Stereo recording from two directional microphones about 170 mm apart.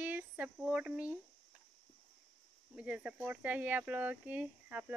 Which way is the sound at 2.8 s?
5° right (ahead or behind).